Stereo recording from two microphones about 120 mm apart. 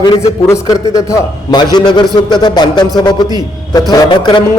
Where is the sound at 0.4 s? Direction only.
25° left (ahead or behind).